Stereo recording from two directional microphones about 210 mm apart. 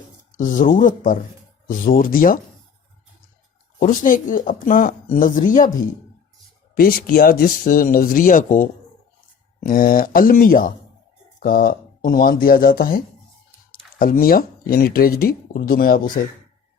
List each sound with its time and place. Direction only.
0.3 s speech: 40° left (ahead or behind)
3.8 s speech: 40° left (ahead or behind)
6.7 s speech: 45° left (ahead or behind)